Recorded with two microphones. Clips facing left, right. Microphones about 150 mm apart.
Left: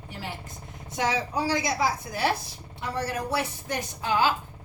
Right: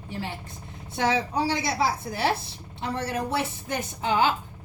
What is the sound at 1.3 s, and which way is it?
A woman's voice, 25° right (ahead or behind).